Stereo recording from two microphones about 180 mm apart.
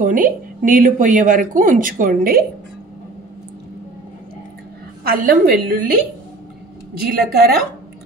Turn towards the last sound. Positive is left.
turn(degrees=-60)  # may be behind; listen again after turning